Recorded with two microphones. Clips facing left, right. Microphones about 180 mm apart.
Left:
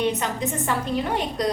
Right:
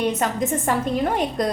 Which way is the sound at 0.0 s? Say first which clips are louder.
Right 2 dB; 45° right (ahead or behind).